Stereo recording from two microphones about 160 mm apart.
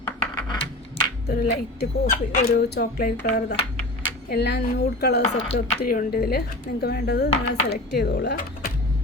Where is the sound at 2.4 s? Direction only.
45° left (ahead or behind).